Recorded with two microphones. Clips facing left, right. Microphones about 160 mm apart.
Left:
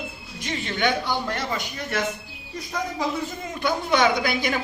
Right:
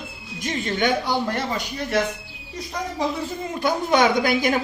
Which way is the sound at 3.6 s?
45° right (ahead or behind).